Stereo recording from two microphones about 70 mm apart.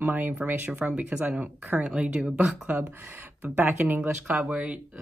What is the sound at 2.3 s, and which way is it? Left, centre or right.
Speech, right.